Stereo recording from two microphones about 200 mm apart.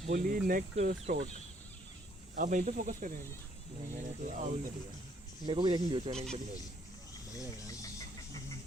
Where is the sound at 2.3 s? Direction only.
40° right (ahead or behind).